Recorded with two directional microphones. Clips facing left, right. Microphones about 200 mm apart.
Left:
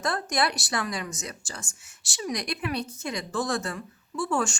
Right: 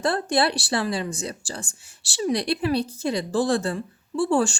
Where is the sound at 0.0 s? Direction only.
30° right (ahead or behind).